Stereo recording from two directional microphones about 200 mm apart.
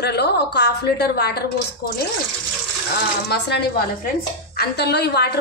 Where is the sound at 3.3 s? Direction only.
55° left (ahead or behind).